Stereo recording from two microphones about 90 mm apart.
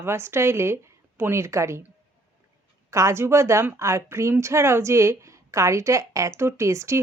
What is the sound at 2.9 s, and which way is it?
A woman's voice, 35° right (ahead or behind).